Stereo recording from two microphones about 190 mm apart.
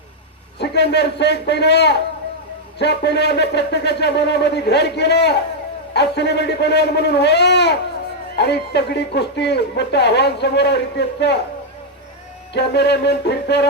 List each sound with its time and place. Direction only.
0.6 s speech: 60° left (ahead or behind)
12.5 s speech: 60° left (ahead or behind)